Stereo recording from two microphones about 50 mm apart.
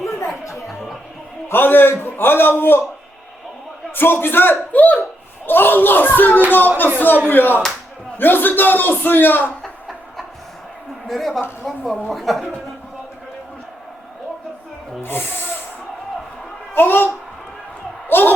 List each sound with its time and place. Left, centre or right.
1.5 s a man's voice: left
3.9 s a man's voice: left
4.7 s a man's voice: left
5.5 s a man's voice: left
11.1 s a woman's voice: centre
16.7 s a man's voice: left
18.1 s a man's voice: left